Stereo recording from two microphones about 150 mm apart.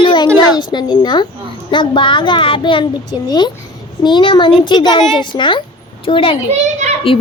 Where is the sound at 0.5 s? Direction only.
30° left (ahead or behind).